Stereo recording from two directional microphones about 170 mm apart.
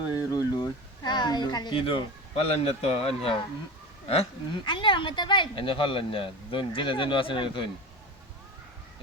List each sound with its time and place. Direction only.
0.1 s speech: 20° left (ahead or behind)